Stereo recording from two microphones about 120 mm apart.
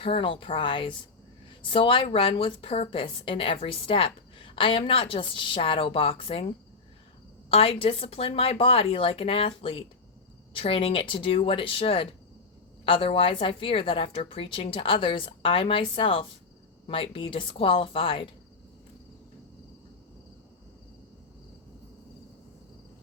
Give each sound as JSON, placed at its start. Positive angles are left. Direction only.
{"t": 0.0, "sound": "a woman's voice", "side_deg": 45}
{"t": 7.5, "sound": "a woman's voice", "side_deg": 50}